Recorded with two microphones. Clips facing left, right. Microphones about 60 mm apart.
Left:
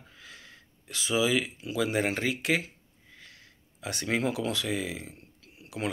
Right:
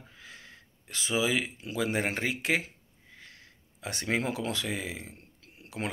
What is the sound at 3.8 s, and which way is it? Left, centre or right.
Speech, right.